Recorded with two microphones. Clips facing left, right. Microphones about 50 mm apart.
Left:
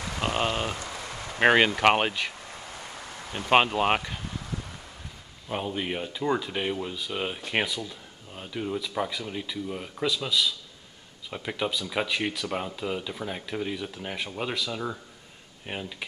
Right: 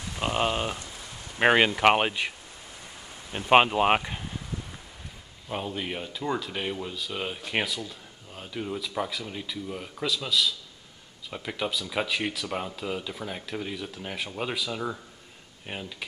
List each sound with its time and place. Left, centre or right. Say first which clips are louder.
0.2 s a sound: right 1 dB; centre
0.7 s rain on surface: left 5 dB; left
1.4 s speech: even; centre
3.3 s speech: right 2 dB; centre
5.5 s speech: left 2 dB; centre